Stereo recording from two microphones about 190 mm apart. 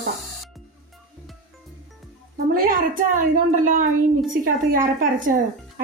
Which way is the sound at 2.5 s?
50° right (ahead or behind).